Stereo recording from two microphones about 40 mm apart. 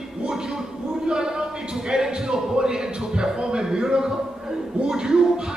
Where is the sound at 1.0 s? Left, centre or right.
Right.